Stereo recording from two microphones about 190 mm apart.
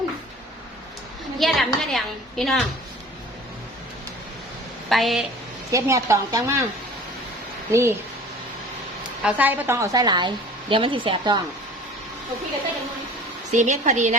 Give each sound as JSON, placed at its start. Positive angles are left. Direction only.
{"t": 1.4, "sound": "a woman's voice", "side_deg": 0}
{"t": 4.9, "sound": "a woman's voice", "side_deg": 0}
{"t": 5.7, "sound": "a woman's voice", "side_deg": -15}
{"t": 7.7, "sound": "a woman's voice", "side_deg": -15}
{"t": 9.2, "sound": "a woman's voice", "side_deg": -10}
{"t": 13.5, "sound": "a woman's voice", "side_deg": -40}